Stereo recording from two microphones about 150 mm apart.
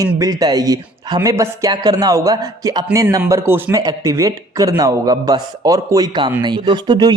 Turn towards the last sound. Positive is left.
turn(degrees=-30)  # may be behind; listen again after turning